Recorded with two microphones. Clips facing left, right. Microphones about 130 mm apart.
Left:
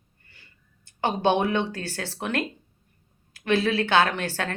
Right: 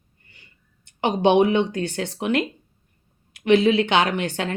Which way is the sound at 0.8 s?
20° right (ahead or behind).